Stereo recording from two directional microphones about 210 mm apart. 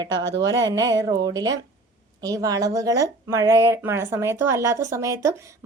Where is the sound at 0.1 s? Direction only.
20° right (ahead or behind).